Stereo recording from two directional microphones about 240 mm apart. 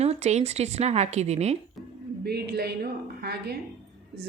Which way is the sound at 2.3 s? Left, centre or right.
Right.